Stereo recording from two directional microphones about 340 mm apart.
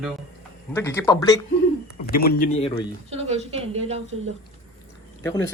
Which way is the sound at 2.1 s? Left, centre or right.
Left.